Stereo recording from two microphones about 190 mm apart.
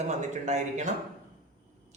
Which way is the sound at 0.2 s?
40° right (ahead or behind).